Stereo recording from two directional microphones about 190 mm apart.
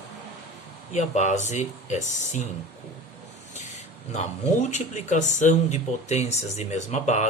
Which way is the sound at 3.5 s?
40° left (ahead or behind).